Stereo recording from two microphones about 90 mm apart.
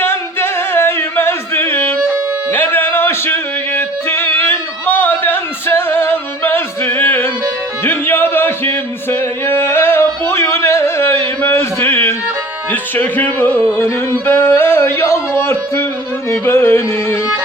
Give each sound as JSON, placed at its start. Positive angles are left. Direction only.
{"t": 0.0, "sound": "singing", "side_deg": 25}
{"t": 2.5, "sound": "music", "side_deg": 20}
{"t": 7.9, "sound": "a sound", "side_deg": 25}
{"t": 12.7, "sound": "carnatic music", "side_deg": 20}
{"t": 13.7, "sound": "a sound", "side_deg": 25}
{"t": 16.3, "sound": "carnatic music", "side_deg": 30}